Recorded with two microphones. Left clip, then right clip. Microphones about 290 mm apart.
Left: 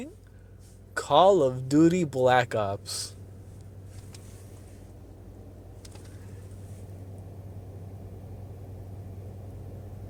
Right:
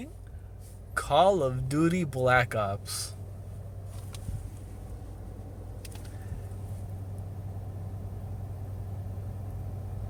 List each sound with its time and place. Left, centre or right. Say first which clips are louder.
0.9 s speech: left 3 dB; centre